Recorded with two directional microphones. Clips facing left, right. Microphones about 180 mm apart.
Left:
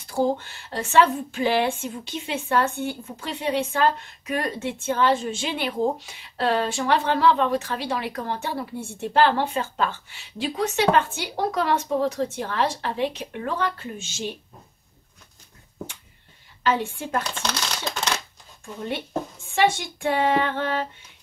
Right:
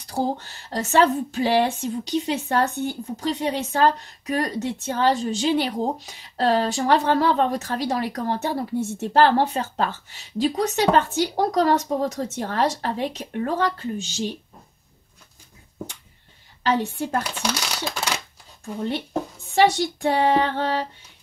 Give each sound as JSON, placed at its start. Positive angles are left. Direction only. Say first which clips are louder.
{"t": 0.0, "sound": "a woman's voice", "louder": "left 2 dB", "side_deg": -40}
{"t": 16.7, "sound": "a woman's voice", "louder": "right 3 dB", "side_deg": -40}
{"t": 17.2, "sound": "speech", "louder": "right 2 dB", "side_deg": -10}
{"t": 19.5, "sound": "a woman's voice", "louder": "right 3 dB", "side_deg": -40}